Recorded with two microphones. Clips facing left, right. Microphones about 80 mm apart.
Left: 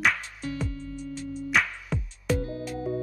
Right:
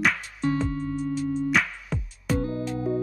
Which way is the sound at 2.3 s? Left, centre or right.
Right.